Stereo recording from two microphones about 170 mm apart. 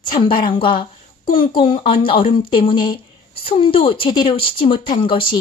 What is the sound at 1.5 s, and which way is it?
A woman's voice, 30° left (ahead or behind).